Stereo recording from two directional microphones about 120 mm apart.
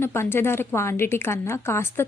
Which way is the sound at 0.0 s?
20° left (ahead or behind).